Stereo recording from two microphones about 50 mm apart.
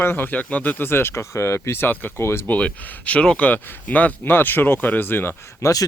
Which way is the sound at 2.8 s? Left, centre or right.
Left.